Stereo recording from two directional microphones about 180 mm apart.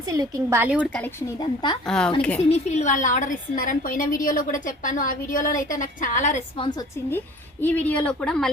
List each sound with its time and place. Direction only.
0.1 s a woman's voice: 20° right (ahead or behind)
0.8 s speech: 10° left (ahead or behind)
1.4 s a woman's voice: 25° left (ahead or behind)
1.9 s speech: 5° left (ahead or behind)
2.5 s a woman's voice: 40° left (ahead or behind)
6.6 s a woman's voice: 20° left (ahead or behind)
7.6 s speech: 10° left (ahead or behind)